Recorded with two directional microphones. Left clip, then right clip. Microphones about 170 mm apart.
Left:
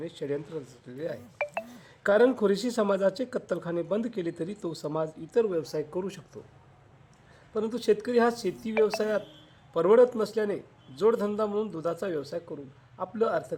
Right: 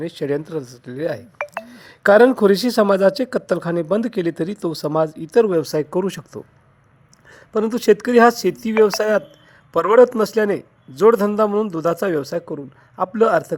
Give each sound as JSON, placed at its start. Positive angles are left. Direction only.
{"t": 0.0, "sound": "a man's voice", "side_deg": -40}